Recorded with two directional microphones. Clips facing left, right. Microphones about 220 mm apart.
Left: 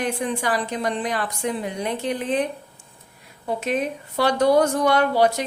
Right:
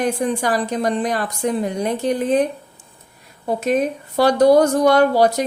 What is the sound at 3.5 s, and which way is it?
A woman's voice, 40° right (ahead or behind).